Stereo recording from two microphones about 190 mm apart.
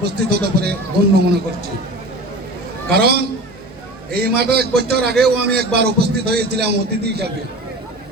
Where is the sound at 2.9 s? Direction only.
55° right (ahead or behind).